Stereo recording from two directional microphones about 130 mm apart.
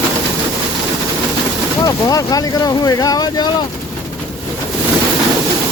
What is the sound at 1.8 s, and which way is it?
Speech, 25° left (ahead or behind).